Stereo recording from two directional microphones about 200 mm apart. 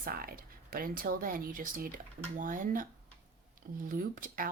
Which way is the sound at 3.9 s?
45° right (ahead or behind).